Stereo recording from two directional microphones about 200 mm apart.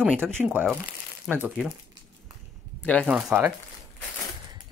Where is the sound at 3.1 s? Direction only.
5° right (ahead or behind).